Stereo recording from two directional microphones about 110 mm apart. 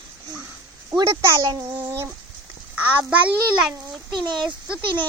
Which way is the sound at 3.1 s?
10° right (ahead or behind).